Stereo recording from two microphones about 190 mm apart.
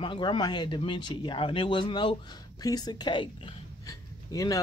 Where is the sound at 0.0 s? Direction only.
25° left (ahead or behind).